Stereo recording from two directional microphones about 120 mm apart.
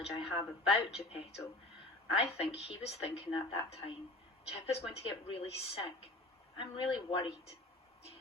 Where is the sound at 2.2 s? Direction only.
55° left (ahead or behind).